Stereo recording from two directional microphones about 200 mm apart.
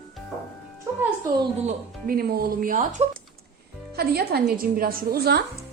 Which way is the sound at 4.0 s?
50° right (ahead or behind).